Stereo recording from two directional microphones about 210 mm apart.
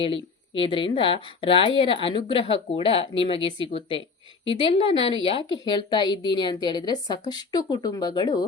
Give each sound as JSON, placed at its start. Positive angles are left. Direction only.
{"t": 0.0, "sound": "a woman's voice", "side_deg": 25}